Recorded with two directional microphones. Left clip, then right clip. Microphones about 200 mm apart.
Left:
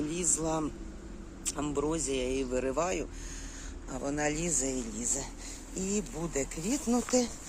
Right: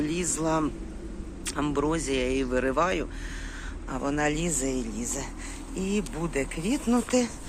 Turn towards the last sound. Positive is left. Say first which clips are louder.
# right 4 dB
turn(degrees=10)  # may be behind; listen again after turning